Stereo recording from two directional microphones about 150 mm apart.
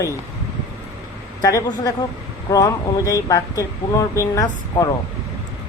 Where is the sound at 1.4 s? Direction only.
25° left (ahead or behind).